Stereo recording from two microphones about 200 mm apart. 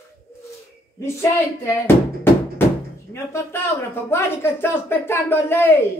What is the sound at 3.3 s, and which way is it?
Speech, 10° left (ahead or behind).